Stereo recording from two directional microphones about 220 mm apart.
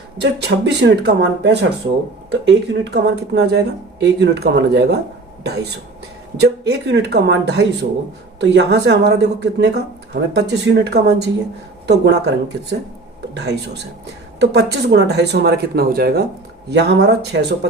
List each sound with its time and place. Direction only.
0.2 s a woman's voice: 50° right (ahead or behind)
6.3 s a woman's voice: 50° right (ahead or behind)
13.3 s a woman's voice: 50° right (ahead or behind)